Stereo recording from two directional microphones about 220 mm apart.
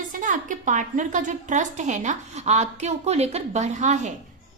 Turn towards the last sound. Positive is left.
turn(degrees=-35)  # may be behind; listen again after turning